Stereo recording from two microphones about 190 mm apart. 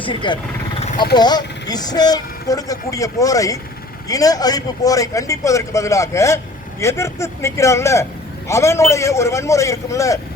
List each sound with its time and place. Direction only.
0.0 s a man's voice: 25° left (ahead or behind)